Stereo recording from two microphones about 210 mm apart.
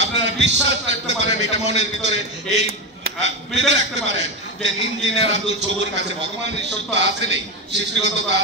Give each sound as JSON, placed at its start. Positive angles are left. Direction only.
{"t": 0.0, "sound": "a man's voice", "side_deg": -55}